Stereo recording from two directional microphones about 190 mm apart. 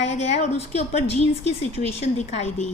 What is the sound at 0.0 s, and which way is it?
A woman's voice, 35° left (ahead or behind).